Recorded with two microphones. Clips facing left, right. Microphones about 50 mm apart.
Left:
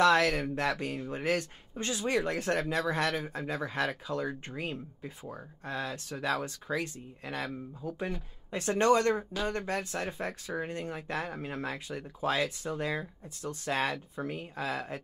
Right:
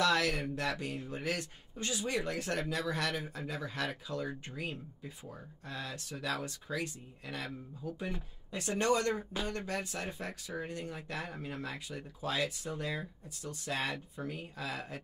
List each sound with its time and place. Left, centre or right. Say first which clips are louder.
0.0 s speech: left 6 dB; left